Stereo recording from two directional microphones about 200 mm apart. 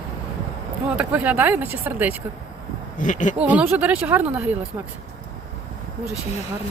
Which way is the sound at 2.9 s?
40° left (ahead or behind).